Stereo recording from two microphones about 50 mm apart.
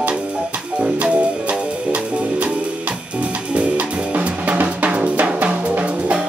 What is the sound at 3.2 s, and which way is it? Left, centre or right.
Drum kit, right.